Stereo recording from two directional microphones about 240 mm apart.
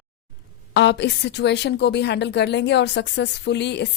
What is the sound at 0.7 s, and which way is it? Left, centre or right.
Speech, left.